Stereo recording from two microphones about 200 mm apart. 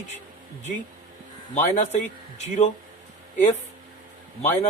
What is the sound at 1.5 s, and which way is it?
Speech, 35° left (ahead or behind).